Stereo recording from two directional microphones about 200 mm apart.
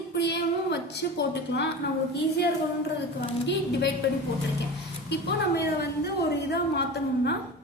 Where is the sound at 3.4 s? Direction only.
60° left (ahead or behind).